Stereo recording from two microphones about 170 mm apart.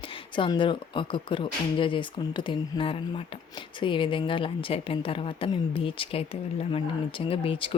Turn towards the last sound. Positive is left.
turn(degrees=30)  # may be behind; listen again after turning